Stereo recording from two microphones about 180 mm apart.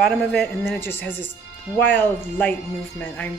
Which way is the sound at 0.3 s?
10° left (ahead or behind).